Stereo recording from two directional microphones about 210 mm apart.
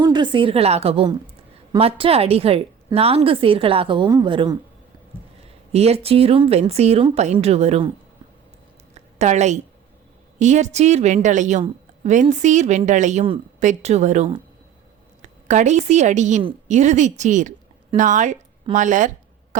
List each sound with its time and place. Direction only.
0.0 s a woman's voice: 20° right (ahead or behind)
5.7 s a woman's voice: 30° right (ahead or behind)
9.1 s a woman's voice: 35° right (ahead or behind)